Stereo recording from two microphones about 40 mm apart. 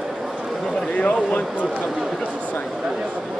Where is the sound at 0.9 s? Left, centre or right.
Left.